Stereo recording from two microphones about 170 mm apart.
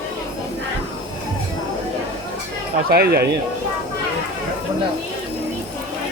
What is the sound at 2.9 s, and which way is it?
Speech, 70° right (ahead or behind).